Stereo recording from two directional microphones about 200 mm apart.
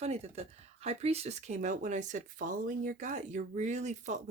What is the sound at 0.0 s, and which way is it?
Speech, 30° right (ahead or behind).